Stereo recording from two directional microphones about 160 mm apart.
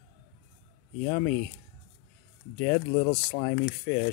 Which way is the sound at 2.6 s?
35° left (ahead or behind).